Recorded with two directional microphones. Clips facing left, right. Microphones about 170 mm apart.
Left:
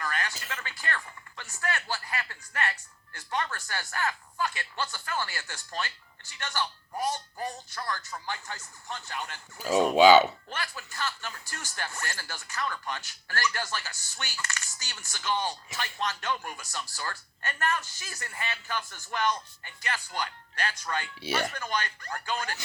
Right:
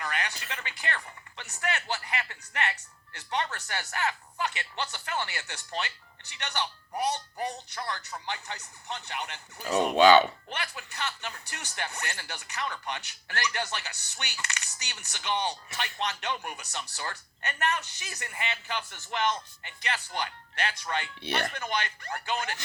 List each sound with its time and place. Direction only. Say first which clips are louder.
0.0 s chopping: even; 20° right (ahead or behind)
1.6 s speech: right 1 dB; 20° right (ahead or behind)
9.9 s speech: left 1 dB; 10° left (ahead or behind)
10.5 s speech: even; 20° right (ahead or behind)
21.2 s speech: left 1 dB; 5° left (ahead or behind)
21.5 s speech: even; 20° right (ahead or behind)